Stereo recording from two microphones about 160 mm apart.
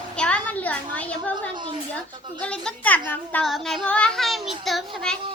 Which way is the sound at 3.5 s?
Centre (ahead or behind).